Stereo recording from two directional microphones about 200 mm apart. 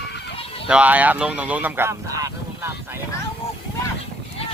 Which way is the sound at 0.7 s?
5° right (ahead or behind).